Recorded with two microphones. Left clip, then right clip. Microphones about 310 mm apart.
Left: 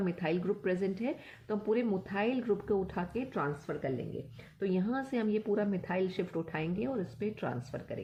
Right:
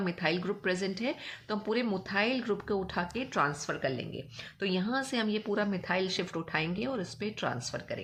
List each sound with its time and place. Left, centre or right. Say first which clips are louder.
0.0 s a woman's voice: right 2 dB; centre